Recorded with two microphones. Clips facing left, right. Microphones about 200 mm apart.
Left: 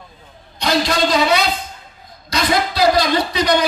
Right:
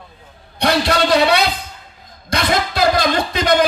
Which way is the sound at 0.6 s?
60° right (ahead or behind).